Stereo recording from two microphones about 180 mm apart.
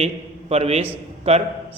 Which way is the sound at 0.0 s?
35° right (ahead or behind).